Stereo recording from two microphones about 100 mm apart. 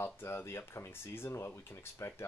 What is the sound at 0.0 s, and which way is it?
Speech, 25° left (ahead or behind).